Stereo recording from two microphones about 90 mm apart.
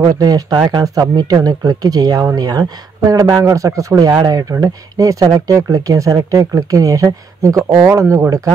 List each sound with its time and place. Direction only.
0.1 s speech: 45° right (ahead or behind)